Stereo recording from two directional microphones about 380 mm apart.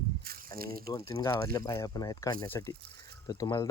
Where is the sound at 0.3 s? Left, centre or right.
Right.